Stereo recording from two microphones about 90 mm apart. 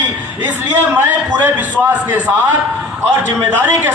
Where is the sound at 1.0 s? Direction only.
25° right (ahead or behind).